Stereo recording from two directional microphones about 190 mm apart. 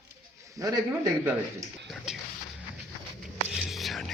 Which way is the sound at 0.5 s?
15° right (ahead or behind).